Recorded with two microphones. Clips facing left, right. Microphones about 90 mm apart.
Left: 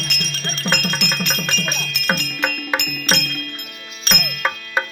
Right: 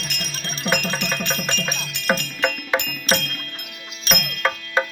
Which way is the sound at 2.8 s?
90° left.